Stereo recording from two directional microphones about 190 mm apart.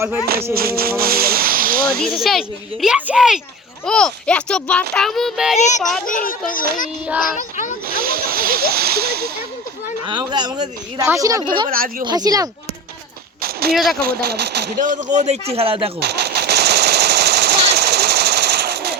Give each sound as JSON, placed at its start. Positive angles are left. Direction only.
{"t": 0.5, "sound": "speech", "side_deg": -50}
{"t": 2.0, "sound": "a child's voice", "side_deg": 0}
{"t": 5.5, "sound": "a child's voice", "side_deg": 40}
{"t": 7.9, "sound": "snake", "side_deg": -50}
{"t": 10.1, "sound": "speech", "side_deg": -25}
{"t": 11.7, "sound": "speech", "side_deg": -50}
{"t": 12.0, "sound": "speech", "side_deg": -20}
{"t": 13.4, "sound": "a sound", "side_deg": -55}
{"t": 14.0, "sound": "speech", "side_deg": -50}
{"t": 16.0, "sound": "machine gun", "side_deg": -60}
{"t": 17.7, "sound": "jackhammer", "side_deg": -60}